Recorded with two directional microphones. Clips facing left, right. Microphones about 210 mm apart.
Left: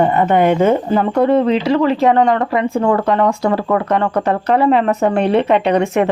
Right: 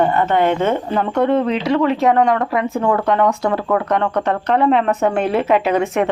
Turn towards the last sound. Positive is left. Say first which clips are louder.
# left 2 dB
turn(degrees=0)  # may be behind; listen again after turning